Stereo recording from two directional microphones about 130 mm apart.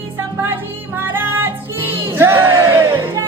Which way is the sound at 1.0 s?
15° right (ahead or behind).